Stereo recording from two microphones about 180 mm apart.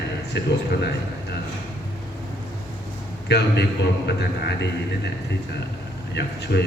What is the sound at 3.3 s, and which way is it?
Speech, 70° left (ahead or behind).